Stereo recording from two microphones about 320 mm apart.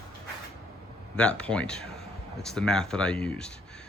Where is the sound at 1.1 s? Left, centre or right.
Centre.